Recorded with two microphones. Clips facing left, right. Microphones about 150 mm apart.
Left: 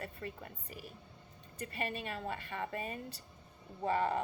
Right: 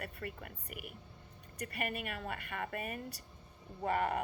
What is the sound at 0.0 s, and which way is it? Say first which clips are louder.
A woman's voice: even; 25° left (ahead or behind).